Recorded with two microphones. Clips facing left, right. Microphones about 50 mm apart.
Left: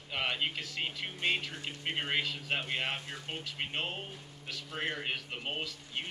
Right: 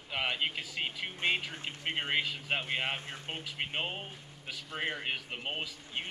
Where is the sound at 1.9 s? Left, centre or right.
Centre.